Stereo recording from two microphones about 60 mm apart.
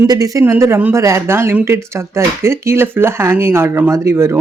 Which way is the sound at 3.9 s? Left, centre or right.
Right.